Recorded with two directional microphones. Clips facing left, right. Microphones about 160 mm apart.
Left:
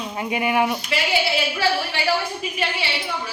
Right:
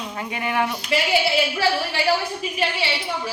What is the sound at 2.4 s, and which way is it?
Speech, 35° right (ahead or behind).